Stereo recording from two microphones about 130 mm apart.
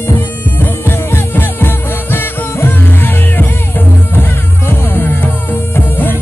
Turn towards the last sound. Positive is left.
turn(degrees=15)  # may be behind; listen again after turning